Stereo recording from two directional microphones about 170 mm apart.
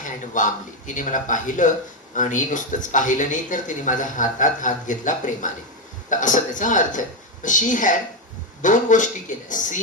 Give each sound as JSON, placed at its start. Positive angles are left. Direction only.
{"t": 0.3, "sound": "speech", "side_deg": 50}